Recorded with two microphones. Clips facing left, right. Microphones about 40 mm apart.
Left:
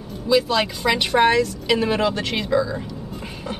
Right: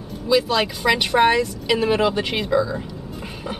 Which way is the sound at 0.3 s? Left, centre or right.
Centre.